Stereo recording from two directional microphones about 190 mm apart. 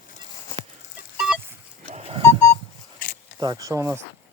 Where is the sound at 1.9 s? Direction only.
35° right (ahead or behind).